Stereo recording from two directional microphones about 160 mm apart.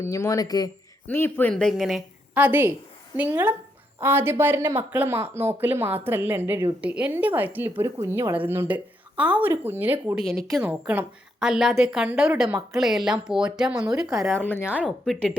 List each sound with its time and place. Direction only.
0.0 s speech: 20° left (ahead or behind)
1.0 s speech: 10° left (ahead or behind)
2.3 s speech: 10° right (ahead or behind)
10.3 s a woman's voice: centre (ahead or behind)
10.6 s a woman's voice: 10° right (ahead or behind)
14.3 s speech: 10° left (ahead or behind)
14.6 s a woman's voice: 5° right (ahead or behind)